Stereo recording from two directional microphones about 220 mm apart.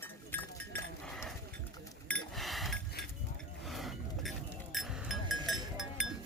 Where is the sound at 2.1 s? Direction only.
Centre (ahead or behind).